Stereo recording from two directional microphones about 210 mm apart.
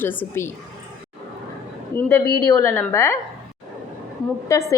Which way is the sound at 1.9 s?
10° left (ahead or behind).